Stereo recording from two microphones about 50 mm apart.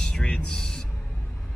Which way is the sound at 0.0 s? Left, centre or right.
Centre.